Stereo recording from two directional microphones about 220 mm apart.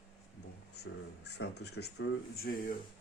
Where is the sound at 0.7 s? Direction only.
50° left (ahead or behind).